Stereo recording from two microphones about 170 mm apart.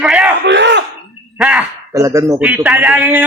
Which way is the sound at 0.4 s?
90° right.